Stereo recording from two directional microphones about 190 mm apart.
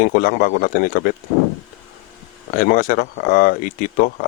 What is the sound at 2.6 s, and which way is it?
Speech, 50° left (ahead or behind).